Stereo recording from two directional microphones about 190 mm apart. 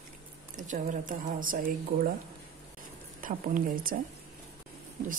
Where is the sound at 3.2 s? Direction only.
45° right (ahead or behind).